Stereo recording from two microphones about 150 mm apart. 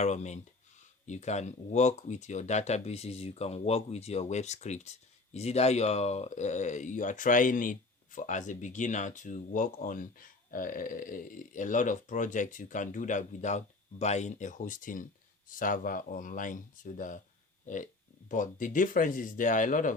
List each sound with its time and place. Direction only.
0.0 s speech: 50° left (ahead or behind)
18.3 s speech: 60° left (ahead or behind)